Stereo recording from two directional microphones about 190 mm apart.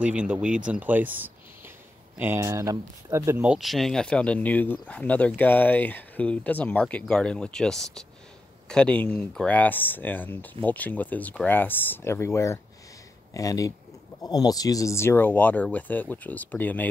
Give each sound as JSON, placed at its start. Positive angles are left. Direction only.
{"t": 0.0, "sound": "speech", "side_deg": -5}
{"t": 3.5, "sound": "speech", "side_deg": 0}